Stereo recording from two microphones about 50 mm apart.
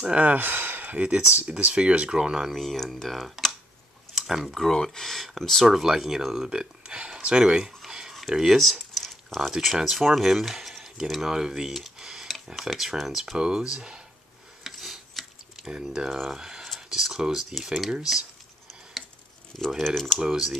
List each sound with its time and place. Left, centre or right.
0.0 s speech: right
2.4 s speech: centre
4.6 s speech: centre
7.8 s a sound: centre
9.5 s speech: centre
11.3 s a sound: centre
12.4 s speech: centre
14.6 s a sound: centre
15.6 s speech: centre
16.3 s a sound: centre
16.7 s speech: centre
19.8 s speech: centre
20.2 s speech: centre